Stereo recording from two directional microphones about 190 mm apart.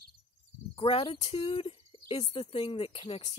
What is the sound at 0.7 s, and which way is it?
Speech, 30° left (ahead or behind).